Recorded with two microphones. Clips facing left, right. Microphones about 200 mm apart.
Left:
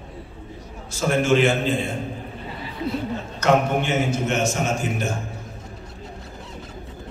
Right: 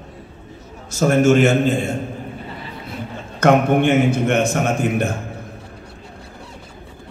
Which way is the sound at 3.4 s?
55° right (ahead or behind).